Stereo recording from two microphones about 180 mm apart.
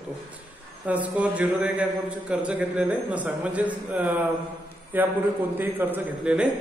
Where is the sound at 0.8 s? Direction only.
10° right (ahead or behind).